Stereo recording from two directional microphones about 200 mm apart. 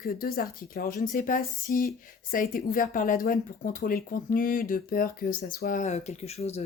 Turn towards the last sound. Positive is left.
turn(degrees=30)  # may be behind; listen again after turning